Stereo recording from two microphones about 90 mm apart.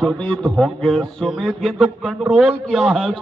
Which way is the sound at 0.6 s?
5° left (ahead or behind).